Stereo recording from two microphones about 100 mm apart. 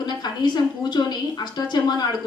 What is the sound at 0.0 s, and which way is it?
A woman's voice, 45° left (ahead or behind).